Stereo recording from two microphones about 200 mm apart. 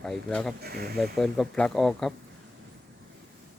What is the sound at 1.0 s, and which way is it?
Speech, centre (ahead or behind).